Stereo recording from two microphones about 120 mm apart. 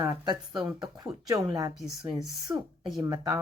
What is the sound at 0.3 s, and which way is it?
Speech, 40° right (ahead or behind).